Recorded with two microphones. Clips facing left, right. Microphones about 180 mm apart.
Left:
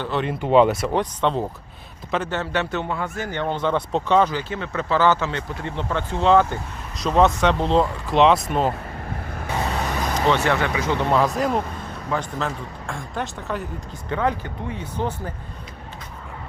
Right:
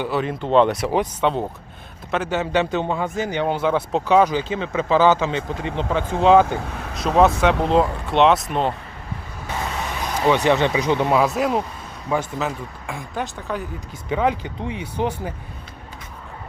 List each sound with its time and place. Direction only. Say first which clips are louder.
0.0 s a man's voice: right 1 dB; 5° right (ahead or behind)
10.2 s a man's voice: right 4 dB; 15° right (ahead or behind); by 13.7 s centre (ahead or behind)
14.1 s a man's voice: right 2 dB; 15° right (ahead or behind)